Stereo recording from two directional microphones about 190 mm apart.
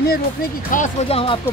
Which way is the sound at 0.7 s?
40° left (ahead or behind).